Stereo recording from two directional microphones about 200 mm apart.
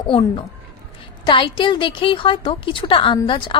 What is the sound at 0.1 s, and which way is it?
A woman's voice, 25° left (ahead or behind).